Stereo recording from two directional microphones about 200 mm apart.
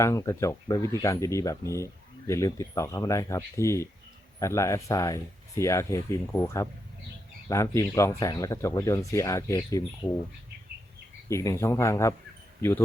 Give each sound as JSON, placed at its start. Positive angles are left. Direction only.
{"t": 0.0, "sound": "speech", "side_deg": 15}
{"t": 11.3, "sound": "speech", "side_deg": 15}